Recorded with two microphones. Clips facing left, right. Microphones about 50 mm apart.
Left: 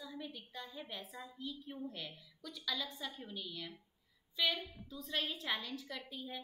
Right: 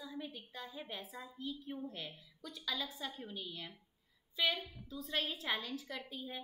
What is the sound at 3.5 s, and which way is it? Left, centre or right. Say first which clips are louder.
Speech: left 1 dB; centre.